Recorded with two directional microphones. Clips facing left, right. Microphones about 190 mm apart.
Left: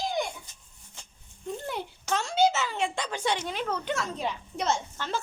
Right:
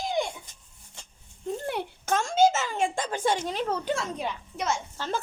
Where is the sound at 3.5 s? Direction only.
35° right (ahead or behind).